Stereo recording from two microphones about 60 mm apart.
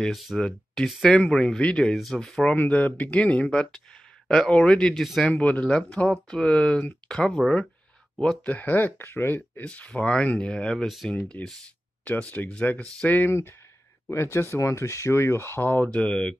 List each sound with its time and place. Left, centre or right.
0.1 s speech: centre
0.4 s speech: centre
2.1 s speech: centre
2.5 s speech: left; by 5.0 s centre
5.3 s speech: left
8.5 s speech: left
9.9 s speech: left
12.4 s speech: left
13.3 s speech: left
15.7 s speech: left